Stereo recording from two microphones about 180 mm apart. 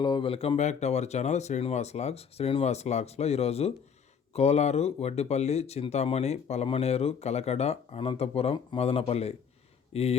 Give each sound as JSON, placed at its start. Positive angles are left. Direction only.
{"t": 0.0, "sound": "speech", "side_deg": 25}